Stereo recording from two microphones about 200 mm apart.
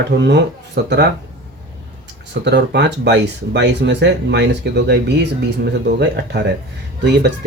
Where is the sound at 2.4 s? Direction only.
60° right (ahead or behind).